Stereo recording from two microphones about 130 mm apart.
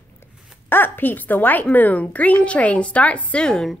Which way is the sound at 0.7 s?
15° left (ahead or behind).